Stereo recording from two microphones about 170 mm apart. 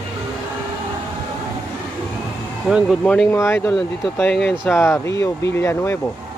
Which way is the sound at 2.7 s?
Centre (ahead or behind).